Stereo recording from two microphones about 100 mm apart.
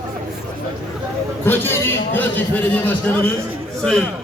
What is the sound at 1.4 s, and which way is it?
A man's voice, 20° left (ahead or behind).